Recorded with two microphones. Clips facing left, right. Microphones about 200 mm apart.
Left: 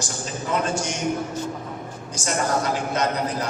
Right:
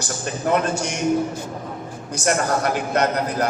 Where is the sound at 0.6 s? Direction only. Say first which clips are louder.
Right 2 dB; 60° right (ahead or behind).